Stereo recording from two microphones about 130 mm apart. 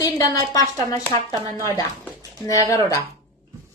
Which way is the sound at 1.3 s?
30° right (ahead or behind).